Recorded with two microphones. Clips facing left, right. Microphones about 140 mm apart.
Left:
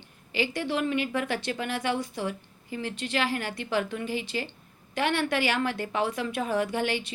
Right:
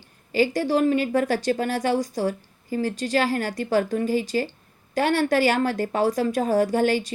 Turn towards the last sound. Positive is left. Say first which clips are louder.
# right 7 dB
turn(degrees=-40)  # may be behind; listen again after turning